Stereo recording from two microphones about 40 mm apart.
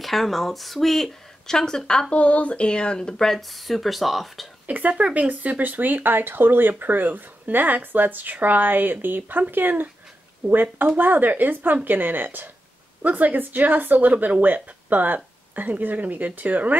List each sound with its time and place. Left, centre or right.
0.0 s speech: centre
2.1 s speech: left; by 3.3 s centre
3.3 s speech: centre
4.6 s speech: right
13.0 s speech: right
14.1 s speech: right
14.4 s speech: right